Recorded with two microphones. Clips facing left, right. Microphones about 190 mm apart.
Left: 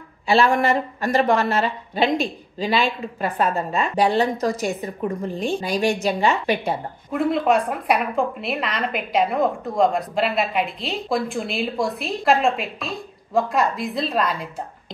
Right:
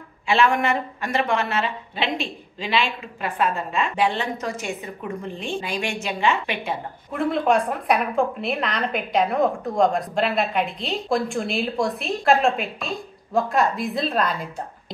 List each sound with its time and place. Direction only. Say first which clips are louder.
0.3 s speech: left 2 dB; 35° left (ahead or behind)
7.1 s a woman's voice: left 1 dB; centre (ahead or behind)